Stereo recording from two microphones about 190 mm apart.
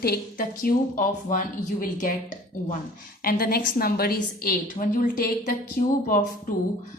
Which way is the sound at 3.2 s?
50° left (ahead or behind).